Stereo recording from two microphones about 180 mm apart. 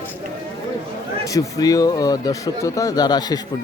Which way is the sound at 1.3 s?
20° left (ahead or behind).